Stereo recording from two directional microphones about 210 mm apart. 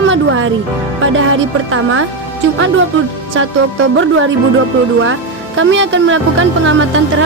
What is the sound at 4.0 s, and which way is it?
A woman's voice, 70° right (ahead or behind).